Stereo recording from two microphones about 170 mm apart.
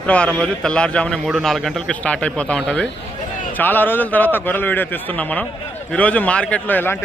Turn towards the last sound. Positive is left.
turn(degrees=10)  # may be behind; listen again after turning